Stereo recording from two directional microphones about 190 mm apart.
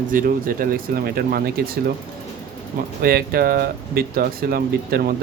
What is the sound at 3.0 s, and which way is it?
Speech, 55° right (ahead or behind).